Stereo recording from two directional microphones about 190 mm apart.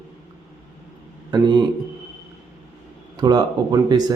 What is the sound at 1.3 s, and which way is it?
Speech, 25° right (ahead or behind).